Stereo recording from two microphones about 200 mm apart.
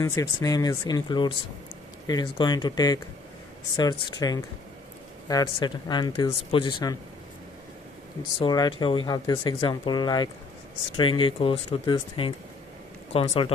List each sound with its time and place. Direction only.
0.0 s speech: 15° left (ahead or behind)
4.2 s speech: 20° left (ahead or behind)
8.4 s speech: 20° left (ahead or behind)